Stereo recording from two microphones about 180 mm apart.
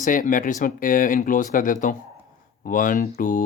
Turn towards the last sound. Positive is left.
turn(degrees=50)  # may be behind; listen again after turning